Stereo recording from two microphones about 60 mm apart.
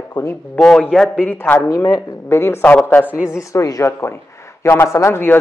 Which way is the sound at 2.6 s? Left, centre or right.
Left.